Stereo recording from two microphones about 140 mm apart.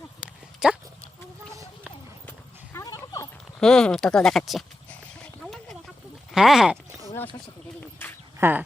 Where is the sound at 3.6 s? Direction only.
5° left (ahead or behind).